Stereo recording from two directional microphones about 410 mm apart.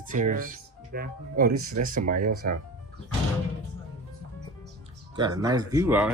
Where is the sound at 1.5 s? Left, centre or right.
Right.